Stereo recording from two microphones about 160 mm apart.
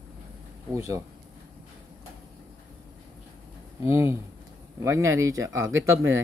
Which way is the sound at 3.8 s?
15° right (ahead or behind).